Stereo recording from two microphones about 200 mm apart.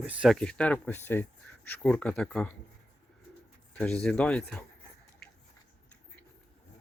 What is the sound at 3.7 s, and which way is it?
Speech, 5° left (ahead or behind).